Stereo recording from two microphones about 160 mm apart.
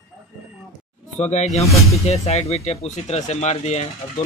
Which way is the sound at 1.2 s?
45° left (ahead or behind).